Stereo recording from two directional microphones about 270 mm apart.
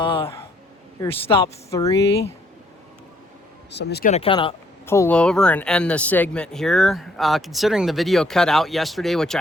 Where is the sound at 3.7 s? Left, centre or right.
Left.